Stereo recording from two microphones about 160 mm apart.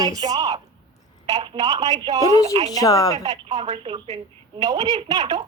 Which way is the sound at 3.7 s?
30° right (ahead or behind).